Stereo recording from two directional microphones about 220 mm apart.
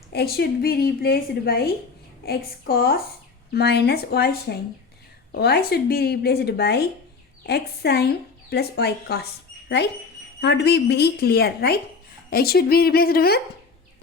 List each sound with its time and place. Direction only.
0.1 s a woman's voice: 45° left (ahead or behind)